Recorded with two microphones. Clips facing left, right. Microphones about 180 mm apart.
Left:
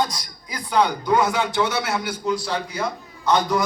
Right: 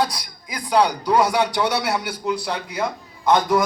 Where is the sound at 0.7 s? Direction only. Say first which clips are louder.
Right 2 dB; 35° right (ahead or behind).